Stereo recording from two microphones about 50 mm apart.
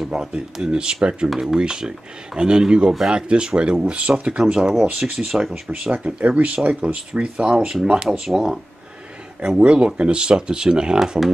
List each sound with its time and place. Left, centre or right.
0.1 s speech: centre
6.0 s speech: right
7.5 s speech: centre
9.6 s speech: right
11.0 s speech: centre